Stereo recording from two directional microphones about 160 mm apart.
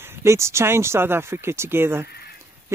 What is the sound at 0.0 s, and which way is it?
Speech, 15° right (ahead or behind).